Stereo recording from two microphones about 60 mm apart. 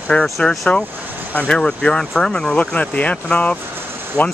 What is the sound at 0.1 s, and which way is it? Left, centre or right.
Speech, centre.